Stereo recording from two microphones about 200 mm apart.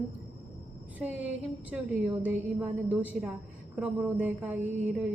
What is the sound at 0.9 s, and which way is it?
Speech, 5° right (ahead or behind).